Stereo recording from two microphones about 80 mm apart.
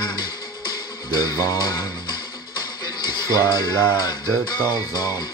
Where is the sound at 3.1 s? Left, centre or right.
Left.